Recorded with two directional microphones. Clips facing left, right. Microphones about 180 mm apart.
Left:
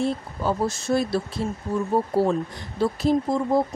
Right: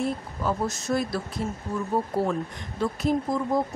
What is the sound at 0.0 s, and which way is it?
Speech, 30° left (ahead or behind).